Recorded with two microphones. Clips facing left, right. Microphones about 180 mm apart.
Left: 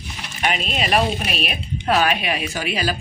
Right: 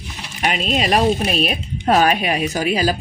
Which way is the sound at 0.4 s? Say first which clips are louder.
Right 4 dB; 35° right (ahead or behind).